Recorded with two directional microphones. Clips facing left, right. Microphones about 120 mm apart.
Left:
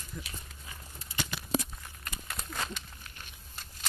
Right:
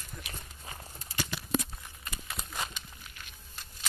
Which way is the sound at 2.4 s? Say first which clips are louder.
Left 1 dB; 10° right (ahead or behind).